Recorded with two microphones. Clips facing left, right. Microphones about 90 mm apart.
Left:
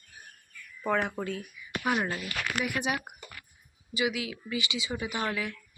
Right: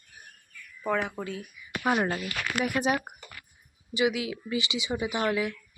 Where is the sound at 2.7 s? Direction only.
40° right (ahead or behind).